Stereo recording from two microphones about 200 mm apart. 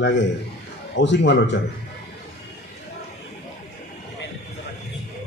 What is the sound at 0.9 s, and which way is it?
Speech, 65° left (ahead or behind).